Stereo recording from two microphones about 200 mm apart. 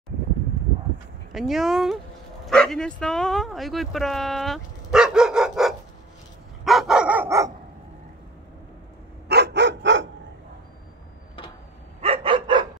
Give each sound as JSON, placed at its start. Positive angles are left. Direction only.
{"t": 1.3, "sound": "speech", "side_deg": 0}
{"t": 6.6, "sound": "dog", "side_deg": 0}
{"t": 9.3, "sound": "dog", "side_deg": -60}
{"t": 12.0, "sound": "dog", "side_deg": -30}